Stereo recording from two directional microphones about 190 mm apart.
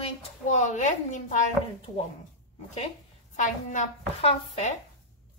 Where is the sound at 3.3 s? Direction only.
40° left (ahead or behind).